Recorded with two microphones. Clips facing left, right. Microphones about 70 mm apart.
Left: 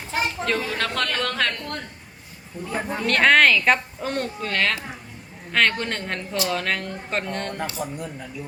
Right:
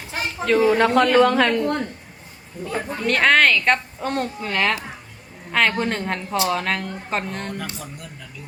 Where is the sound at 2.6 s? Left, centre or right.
Centre.